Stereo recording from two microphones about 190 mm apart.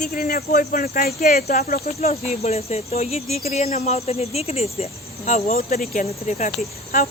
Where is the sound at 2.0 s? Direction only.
35° left (ahead or behind).